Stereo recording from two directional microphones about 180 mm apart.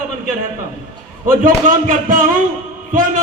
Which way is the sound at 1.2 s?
50° right (ahead or behind).